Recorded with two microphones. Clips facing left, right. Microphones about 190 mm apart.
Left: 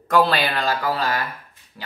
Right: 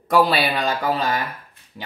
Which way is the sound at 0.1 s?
10° right (ahead or behind).